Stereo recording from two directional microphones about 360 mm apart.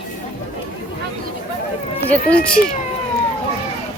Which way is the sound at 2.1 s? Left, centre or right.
Centre.